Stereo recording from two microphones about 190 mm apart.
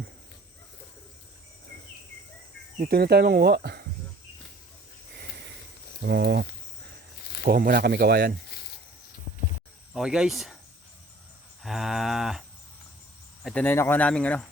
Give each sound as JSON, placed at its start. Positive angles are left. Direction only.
{"t": 2.7, "sound": "speech", "side_deg": -50}
{"t": 6.1, "sound": "speech", "side_deg": -65}
{"t": 7.2, "sound": "snake", "side_deg": 60}
{"t": 7.4, "sound": "speech", "side_deg": -50}
{"t": 9.9, "sound": "moo", "side_deg": -5}
{"t": 11.6, "sound": "moo", "side_deg": 0}
{"t": 13.4, "sound": "speech", "side_deg": 5}